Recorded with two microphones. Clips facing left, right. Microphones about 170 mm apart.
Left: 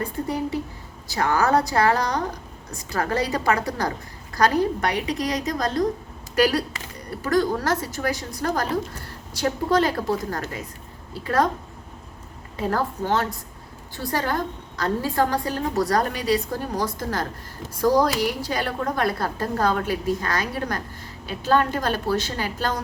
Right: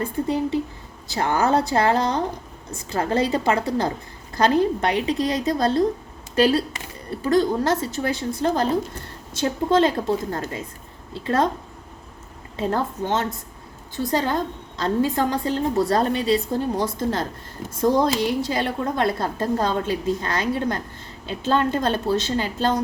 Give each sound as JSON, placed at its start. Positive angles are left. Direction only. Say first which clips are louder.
{"t": 0.0, "sound": "a woman's voice", "louder": "right 3 dB", "side_deg": -25}
{"t": 12.5, "sound": "a woman's voice", "louder": "right 1 dB", "side_deg": -25}